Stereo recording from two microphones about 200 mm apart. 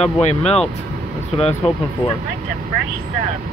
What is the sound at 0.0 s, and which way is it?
Speech, 30° left (ahead or behind).